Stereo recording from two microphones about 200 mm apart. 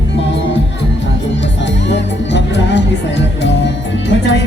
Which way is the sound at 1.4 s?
60° left (ahead or behind).